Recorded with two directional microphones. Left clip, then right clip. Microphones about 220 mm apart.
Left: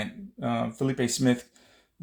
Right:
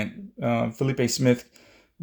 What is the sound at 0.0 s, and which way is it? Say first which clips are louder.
Speech: right 4 dB; 40° right (ahead or behind).